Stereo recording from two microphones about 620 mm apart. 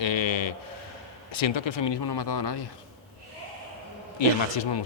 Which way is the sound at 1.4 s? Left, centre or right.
Left.